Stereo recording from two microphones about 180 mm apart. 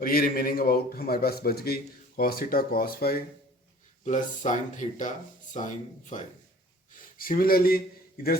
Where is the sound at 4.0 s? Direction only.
45° left (ahead or behind).